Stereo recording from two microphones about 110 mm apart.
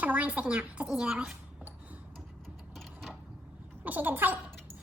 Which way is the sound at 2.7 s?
Centre (ahead or behind).